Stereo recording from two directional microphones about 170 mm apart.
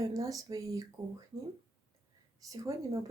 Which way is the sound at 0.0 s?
20° right (ahead or behind).